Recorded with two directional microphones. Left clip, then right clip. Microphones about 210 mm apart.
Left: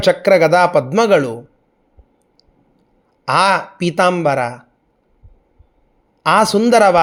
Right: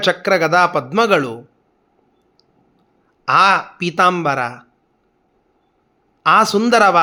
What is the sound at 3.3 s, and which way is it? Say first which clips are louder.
A man's voice: right 1 dB; 15° left (ahead or behind).